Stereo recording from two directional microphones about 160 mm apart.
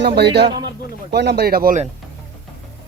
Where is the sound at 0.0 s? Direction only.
90° right; by 1.7 s 70° right (ahead or behind).